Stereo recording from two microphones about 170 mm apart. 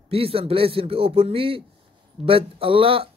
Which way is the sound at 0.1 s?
35° right (ahead or behind).